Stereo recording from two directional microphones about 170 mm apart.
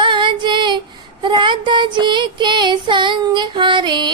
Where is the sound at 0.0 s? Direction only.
30° right (ahead or behind).